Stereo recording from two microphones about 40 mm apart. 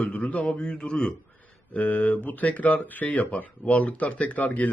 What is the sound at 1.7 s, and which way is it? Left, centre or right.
Speech, left.